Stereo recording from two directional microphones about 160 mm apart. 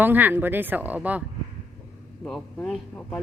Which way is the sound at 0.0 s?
10° right (ahead or behind).